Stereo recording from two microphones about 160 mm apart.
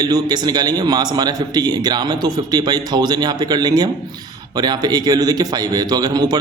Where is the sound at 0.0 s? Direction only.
25° right (ahead or behind).